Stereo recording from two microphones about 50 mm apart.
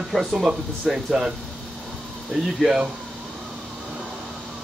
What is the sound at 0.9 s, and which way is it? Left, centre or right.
Speech, centre.